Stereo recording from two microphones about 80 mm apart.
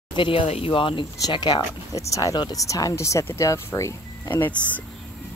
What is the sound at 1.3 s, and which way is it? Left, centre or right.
Speech, left.